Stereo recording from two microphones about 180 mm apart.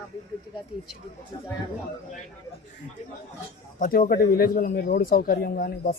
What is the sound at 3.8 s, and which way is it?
Speech, 55° left (ahead or behind).